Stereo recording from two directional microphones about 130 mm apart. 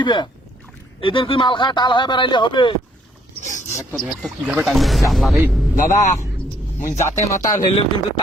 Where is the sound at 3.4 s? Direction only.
75° left (ahead or behind).